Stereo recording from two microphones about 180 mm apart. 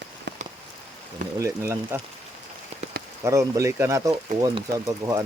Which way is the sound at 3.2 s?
15° right (ahead or behind).